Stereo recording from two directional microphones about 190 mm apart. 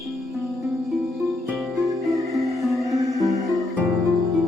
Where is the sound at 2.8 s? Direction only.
20° right (ahead or behind).